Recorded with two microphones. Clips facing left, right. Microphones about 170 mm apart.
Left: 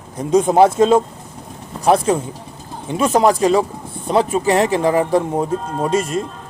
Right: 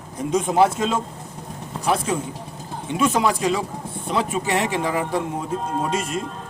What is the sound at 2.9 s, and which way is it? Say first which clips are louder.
Speech: left 6 dB; 40° left (ahead or behind).